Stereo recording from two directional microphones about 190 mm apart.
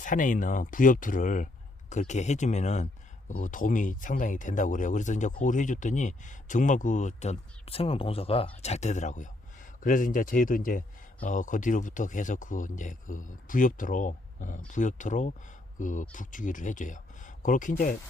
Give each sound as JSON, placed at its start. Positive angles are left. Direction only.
{"t": 0.0, "sound": "speech", "side_deg": 45}